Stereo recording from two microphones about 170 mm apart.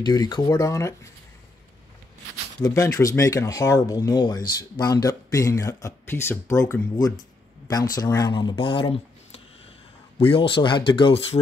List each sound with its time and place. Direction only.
0.0 s speech: 25° left (ahead or behind)
2.6 s speech: 20° left (ahead or behind)